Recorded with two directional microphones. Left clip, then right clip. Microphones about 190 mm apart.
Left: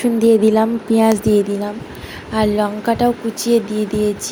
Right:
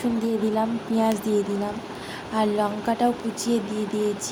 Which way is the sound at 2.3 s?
20° left (ahead or behind).